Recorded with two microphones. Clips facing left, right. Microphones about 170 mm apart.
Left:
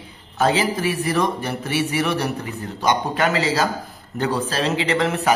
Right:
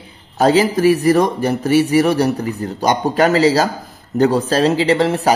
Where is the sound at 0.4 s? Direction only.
40° right (ahead or behind).